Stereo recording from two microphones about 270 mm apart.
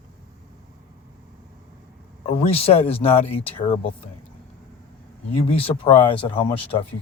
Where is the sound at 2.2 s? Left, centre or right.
Left.